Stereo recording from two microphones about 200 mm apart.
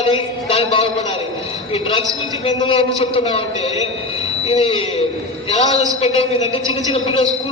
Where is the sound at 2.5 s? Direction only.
30° left (ahead or behind).